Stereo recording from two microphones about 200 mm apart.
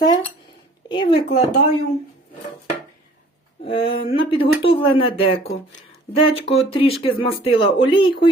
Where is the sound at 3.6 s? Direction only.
25° left (ahead or behind).